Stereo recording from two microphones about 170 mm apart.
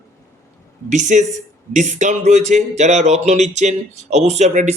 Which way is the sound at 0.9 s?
45° right (ahead or behind).